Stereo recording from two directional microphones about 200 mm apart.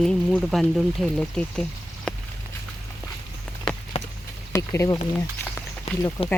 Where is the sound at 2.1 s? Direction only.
5° left (ahead or behind).